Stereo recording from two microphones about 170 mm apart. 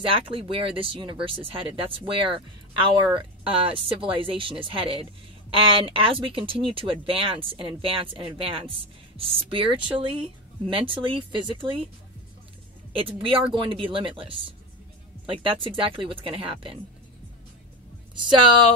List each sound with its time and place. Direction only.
0.1 s speech: 30° right (ahead or behind)
12.9 s speech: 30° right (ahead or behind)